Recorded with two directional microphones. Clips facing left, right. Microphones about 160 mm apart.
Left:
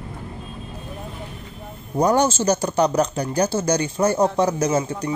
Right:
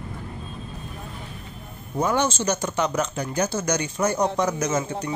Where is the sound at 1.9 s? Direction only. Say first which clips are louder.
Left 5 dB; 40° left (ahead or behind).